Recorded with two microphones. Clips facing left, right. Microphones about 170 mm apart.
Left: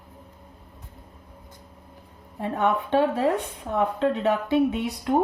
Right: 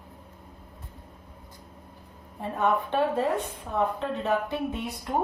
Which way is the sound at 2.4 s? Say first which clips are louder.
Left 2 dB; 70° left (ahead or behind).